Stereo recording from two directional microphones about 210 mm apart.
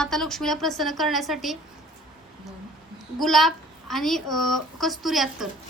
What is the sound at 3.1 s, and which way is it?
A woman's voice, centre (ahead or behind).